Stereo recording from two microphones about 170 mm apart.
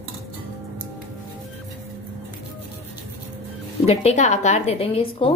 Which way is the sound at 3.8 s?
40° left (ahead or behind).